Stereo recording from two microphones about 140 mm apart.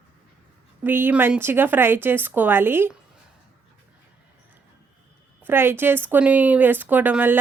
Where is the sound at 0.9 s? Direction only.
15° right (ahead or behind).